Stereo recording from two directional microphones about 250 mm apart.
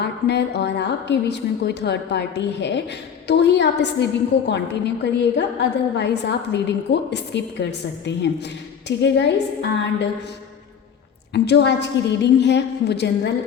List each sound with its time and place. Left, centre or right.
0.0 s a woman's voice: left
11.3 s a woman's voice: left